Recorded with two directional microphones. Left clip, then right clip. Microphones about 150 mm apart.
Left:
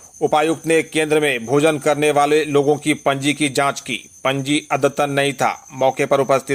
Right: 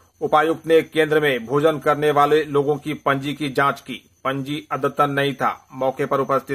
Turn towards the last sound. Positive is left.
turn(degrees=30)  # may be behind; listen again after turning